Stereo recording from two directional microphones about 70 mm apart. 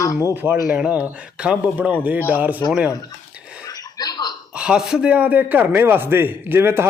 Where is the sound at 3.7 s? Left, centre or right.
Left.